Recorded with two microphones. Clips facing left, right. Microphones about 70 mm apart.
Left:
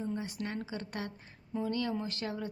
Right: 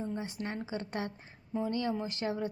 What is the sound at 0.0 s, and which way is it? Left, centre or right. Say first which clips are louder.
A woman's voice: even; right.